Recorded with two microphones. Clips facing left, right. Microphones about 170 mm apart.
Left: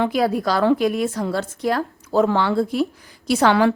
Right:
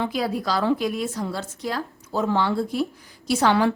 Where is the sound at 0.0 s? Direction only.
55° left (ahead or behind).